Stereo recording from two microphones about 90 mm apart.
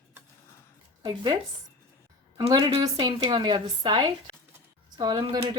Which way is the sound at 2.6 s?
45° right (ahead or behind).